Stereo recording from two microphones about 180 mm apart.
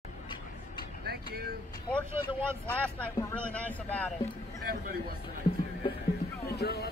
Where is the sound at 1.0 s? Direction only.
60° right (ahead or behind).